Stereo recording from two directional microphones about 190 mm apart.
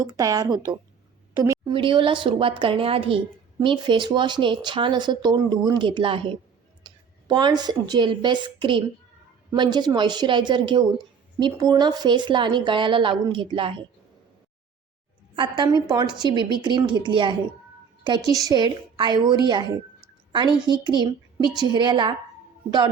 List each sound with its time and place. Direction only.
0.1 s speech: 20° right (ahead or behind)
15.4 s speech: 25° right (ahead or behind)
18.4 s a woman's voice: 20° right (ahead or behind)